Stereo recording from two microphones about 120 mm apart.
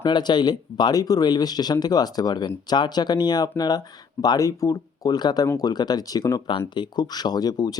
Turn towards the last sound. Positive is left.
turn(degrees=35)  # may be behind; listen again after turning